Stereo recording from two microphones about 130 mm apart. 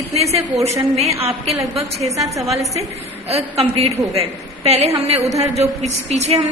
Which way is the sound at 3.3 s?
55° right (ahead or behind).